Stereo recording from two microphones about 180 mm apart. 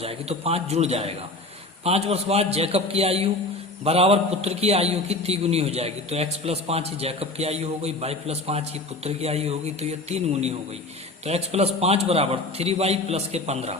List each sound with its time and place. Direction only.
0.0 s a man's voice: 35° right (ahead or behind)